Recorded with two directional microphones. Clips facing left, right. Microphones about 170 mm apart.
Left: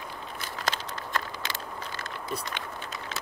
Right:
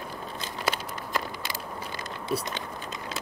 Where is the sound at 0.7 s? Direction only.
10° right (ahead or behind).